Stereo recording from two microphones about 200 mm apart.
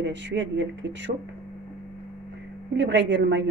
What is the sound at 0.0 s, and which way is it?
A woman's voice, 60° right (ahead or behind).